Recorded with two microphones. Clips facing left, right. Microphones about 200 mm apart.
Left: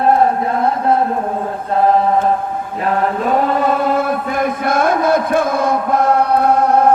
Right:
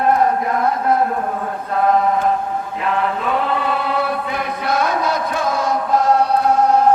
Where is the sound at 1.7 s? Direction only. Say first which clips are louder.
Left 3 dB; 30° left (ahead or behind).